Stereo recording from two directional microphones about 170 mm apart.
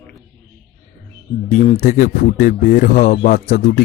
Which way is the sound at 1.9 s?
55° left (ahead or behind).